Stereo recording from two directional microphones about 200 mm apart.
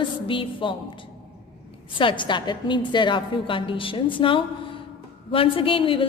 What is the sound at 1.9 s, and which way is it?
A woman's voice, 25° left (ahead or behind).